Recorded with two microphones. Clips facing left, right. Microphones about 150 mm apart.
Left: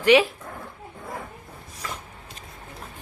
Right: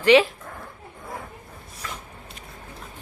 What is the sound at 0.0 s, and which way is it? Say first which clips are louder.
Speech: right 1 dB; 10° left (ahead or behind).